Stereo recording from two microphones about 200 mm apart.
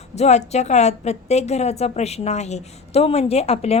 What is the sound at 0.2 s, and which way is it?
A woman's voice, 35° left (ahead or behind).